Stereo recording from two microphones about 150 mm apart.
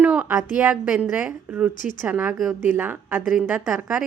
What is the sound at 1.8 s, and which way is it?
Speech, 60° left (ahead or behind).